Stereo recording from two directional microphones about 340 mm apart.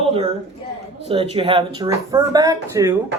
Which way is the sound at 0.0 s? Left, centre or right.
Centre.